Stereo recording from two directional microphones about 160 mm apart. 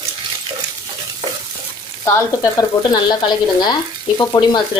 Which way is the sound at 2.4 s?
25° left (ahead or behind).